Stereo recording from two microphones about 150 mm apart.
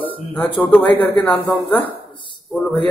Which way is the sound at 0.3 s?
10° left (ahead or behind).